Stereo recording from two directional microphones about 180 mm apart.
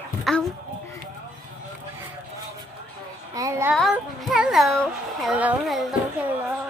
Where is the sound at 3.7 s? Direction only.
Centre (ahead or behind).